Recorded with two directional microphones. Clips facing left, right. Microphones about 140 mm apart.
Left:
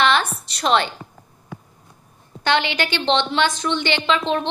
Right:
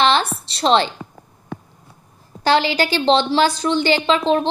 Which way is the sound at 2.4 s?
35° right (ahead or behind).